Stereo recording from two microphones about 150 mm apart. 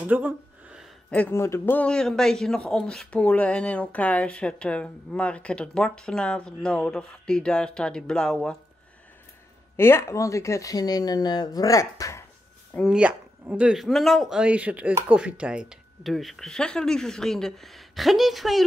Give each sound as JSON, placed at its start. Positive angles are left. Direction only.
{"t": 0.1, "sound": "a sound", "side_deg": -10}
{"t": 1.1, "sound": "speech", "side_deg": 15}
{"t": 9.8, "sound": "speech", "side_deg": 15}
{"t": 12.8, "sound": "speech", "side_deg": -5}
{"t": 14.4, "sound": "speech", "side_deg": -10}